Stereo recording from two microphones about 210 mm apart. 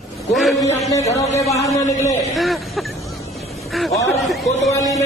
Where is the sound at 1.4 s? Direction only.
30° left (ahead or behind).